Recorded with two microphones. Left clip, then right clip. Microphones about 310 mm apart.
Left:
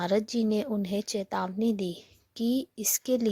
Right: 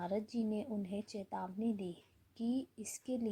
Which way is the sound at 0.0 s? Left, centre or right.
Left.